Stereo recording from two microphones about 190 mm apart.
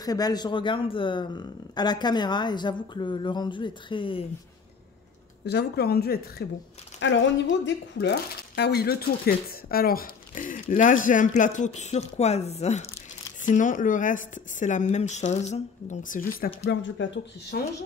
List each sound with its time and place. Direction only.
0.0 s speech: 20° left (ahead or behind)
5.4 s a woman's voice: 60° left (ahead or behind)
7.0 s speech: 70° left (ahead or behind); by 16.4 s 45° left (ahead or behind)
16.6 s speech: 75° left (ahead or behind)